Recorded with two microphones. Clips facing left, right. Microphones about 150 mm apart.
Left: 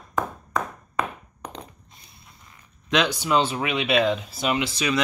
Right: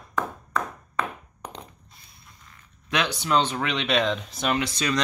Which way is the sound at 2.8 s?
20° left (ahead or behind).